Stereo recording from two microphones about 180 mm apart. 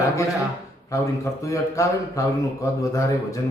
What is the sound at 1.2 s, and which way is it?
Speech, 15° left (ahead or behind).